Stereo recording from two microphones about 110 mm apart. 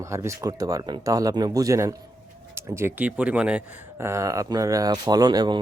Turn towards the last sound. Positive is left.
turn(degrees=-40)  # may be behind; listen again after turning